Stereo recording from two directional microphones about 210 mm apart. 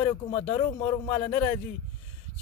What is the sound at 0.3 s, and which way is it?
Speech, 25° left (ahead or behind).